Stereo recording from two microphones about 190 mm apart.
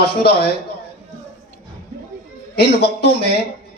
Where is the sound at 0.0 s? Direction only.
60° left (ahead or behind).